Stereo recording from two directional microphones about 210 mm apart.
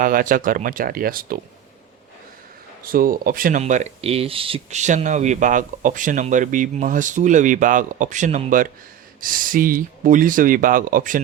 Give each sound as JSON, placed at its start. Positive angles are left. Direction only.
{"t": 0.0, "sound": "speech", "side_deg": -40}
{"t": 2.8, "sound": "speech", "side_deg": -45}